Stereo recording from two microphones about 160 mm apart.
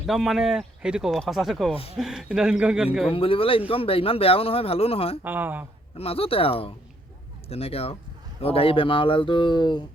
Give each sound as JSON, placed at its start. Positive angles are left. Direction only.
{"t": 0.0, "sound": "speech", "side_deg": 0}
{"t": 3.1, "sound": "speech", "side_deg": 35}
{"t": 5.2, "sound": "speech", "side_deg": -10}
{"t": 6.0, "sound": "speech", "side_deg": 35}